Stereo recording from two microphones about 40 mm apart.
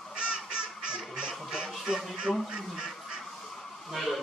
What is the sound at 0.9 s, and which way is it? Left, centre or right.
Duck, centre.